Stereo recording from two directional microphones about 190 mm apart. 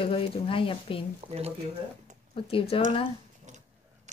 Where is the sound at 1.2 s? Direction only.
35° right (ahead or behind).